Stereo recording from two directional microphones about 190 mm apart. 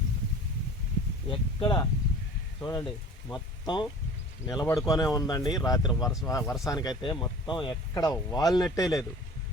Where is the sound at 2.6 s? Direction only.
20° left (ahead or behind).